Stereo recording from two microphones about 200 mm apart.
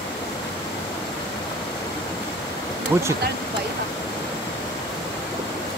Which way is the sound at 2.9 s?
15° right (ahead or behind).